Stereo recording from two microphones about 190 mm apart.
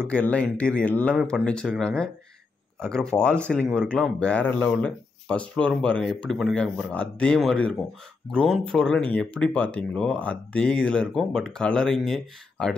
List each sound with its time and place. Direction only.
0.0 s speech: 5° left (ahead or behind)